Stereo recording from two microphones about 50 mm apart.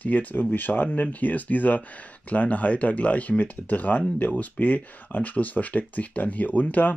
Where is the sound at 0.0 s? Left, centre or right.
Left.